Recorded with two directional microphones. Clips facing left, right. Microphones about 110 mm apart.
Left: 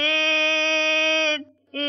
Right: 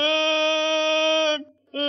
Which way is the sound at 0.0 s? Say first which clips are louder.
Right 3 dB; 20° right (ahead or behind).